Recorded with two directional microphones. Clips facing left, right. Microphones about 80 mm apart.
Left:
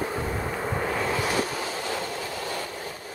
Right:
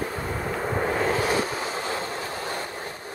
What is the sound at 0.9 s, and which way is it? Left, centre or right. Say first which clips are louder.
Train: right 2 dB; right.